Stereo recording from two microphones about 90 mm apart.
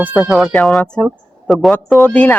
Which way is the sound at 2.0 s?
15° left (ahead or behind).